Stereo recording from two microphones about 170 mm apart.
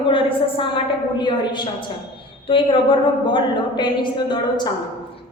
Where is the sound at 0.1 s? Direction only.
30° left (ahead or behind).